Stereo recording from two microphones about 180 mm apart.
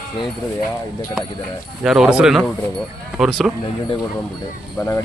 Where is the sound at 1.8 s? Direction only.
5° right (ahead or behind).